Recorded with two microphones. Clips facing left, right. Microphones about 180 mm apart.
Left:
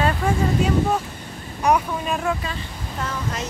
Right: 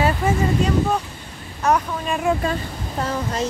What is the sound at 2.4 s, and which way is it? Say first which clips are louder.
Speech: right 7 dB; 40° right (ahead or behind).